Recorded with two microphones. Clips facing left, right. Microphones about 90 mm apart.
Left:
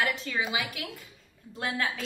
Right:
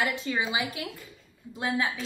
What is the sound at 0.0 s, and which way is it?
Speech, 20° right (ahead or behind).